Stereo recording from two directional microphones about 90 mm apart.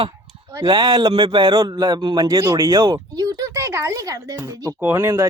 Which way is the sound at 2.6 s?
45° right (ahead or behind).